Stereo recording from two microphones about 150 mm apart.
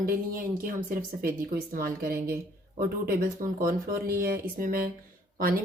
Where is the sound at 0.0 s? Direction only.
75° right (ahead or behind).